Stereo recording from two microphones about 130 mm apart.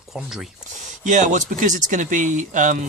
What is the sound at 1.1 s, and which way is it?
Speech, 70° right (ahead or behind).